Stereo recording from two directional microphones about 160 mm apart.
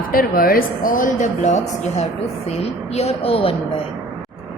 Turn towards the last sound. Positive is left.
turn(degrees=35)  # may be behind; listen again after turning